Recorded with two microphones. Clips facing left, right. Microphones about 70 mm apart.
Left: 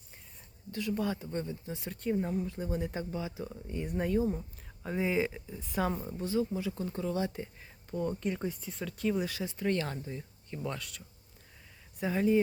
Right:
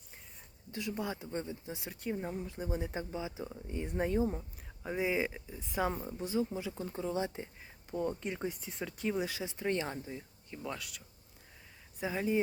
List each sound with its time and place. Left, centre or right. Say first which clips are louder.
0.7 s speech: left 4 dB; centre
4.4 s speech: left 2 dB; centre
6.1 s speech: left 3 dB; centre
10.5 s speech: left 3 dB; centre